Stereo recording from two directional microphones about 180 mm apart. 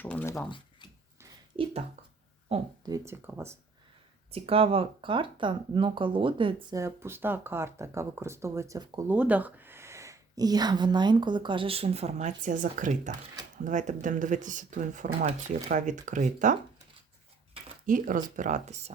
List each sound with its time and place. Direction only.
0.0 s speech: 10° left (ahead or behind)
2.5 s speech: 35° right (ahead or behind)
2.8 s speech: 20° right (ahead or behind)
4.3 s speech: 35° right (ahead or behind)
17.8 s speech: 50° right (ahead or behind)